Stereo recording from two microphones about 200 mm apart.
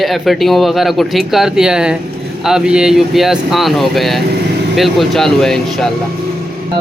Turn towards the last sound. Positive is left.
turn(degrees=0)  # may be behind; listen again after turning